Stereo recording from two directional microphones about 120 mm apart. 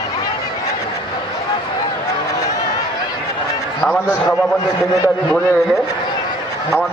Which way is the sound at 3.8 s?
10° left (ahead or behind).